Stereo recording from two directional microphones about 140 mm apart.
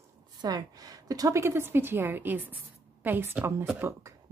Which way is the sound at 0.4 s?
25° right (ahead or behind).